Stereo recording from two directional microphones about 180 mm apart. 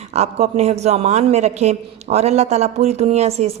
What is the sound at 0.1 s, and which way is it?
A man's voice, 35° right (ahead or behind).